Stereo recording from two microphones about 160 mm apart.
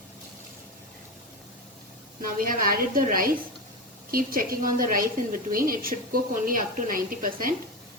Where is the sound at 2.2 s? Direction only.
60° right (ahead or behind).